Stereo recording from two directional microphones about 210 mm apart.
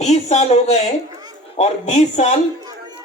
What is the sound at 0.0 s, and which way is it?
Speech, 35° left (ahead or behind).